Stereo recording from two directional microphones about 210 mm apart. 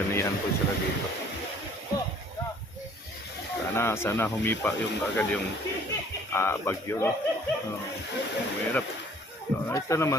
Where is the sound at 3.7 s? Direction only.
10° left (ahead or behind).